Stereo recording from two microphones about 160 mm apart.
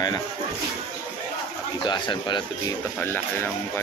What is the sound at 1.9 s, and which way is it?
Speech, 30° left (ahead or behind).